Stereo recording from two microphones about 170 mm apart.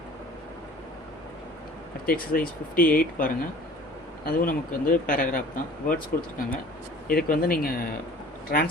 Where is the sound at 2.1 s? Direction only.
55° left (ahead or behind).